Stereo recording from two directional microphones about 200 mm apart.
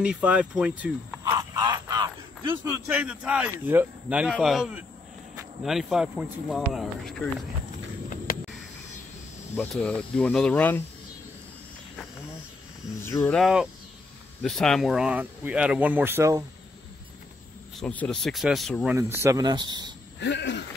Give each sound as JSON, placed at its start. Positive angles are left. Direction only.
{"t": 0.0, "sound": "speech", "side_deg": -5}
{"t": 1.2, "sound": "a sound", "side_deg": -15}
{"t": 2.9, "sound": "speech", "side_deg": -5}
{"t": 9.6, "sound": "speech", "side_deg": 5}
{"t": 13.0, "sound": "speech", "side_deg": 10}
{"t": 13.4, "sound": "speech", "side_deg": 0}
{"t": 17.7, "sound": "speech", "side_deg": 5}
{"t": 18.9, "sound": "speech", "side_deg": -15}
{"t": 20.2, "sound": "cricket", "side_deg": 60}